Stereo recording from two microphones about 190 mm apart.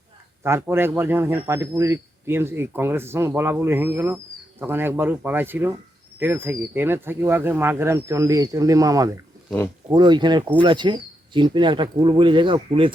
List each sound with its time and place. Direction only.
0.4 s speech: 15° right (ahead or behind)